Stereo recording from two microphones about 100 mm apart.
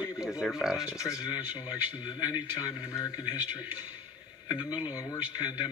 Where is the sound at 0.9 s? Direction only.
35° left (ahead or behind).